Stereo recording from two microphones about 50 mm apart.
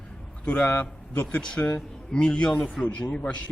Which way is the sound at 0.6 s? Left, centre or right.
Left.